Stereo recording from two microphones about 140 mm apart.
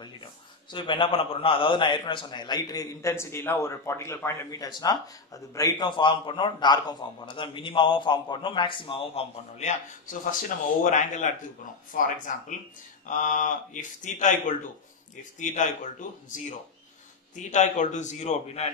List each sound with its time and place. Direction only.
0.0 s a man's voice: 35° left (ahead or behind); by 9.8 s 50° left (ahead or behind)
10.8 s speech: 60° left (ahead or behind)